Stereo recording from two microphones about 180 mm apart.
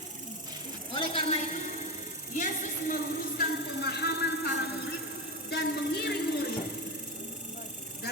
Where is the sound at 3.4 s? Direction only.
65° left (ahead or behind).